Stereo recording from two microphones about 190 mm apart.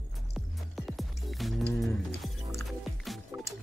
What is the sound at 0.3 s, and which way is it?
Music, centre (ahead or behind).